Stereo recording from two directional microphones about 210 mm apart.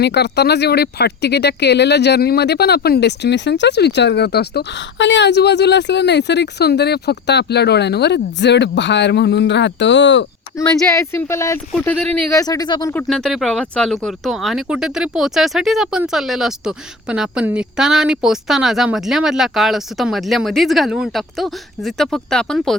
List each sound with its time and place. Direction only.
0.0 s speech: 50° left (ahead or behind)
10.6 s speech: 10° left (ahead or behind)
12.9 s speech: 5° left (ahead or behind)